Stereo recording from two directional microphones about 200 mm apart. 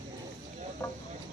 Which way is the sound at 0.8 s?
15° left (ahead or behind).